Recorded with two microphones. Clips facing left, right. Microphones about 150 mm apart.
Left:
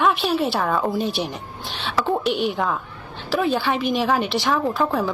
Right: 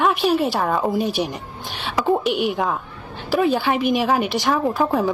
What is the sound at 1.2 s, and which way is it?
Speech, 5° left (ahead or behind).